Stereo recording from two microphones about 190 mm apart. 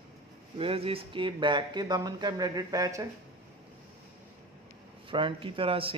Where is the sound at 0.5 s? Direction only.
30° right (ahead or behind).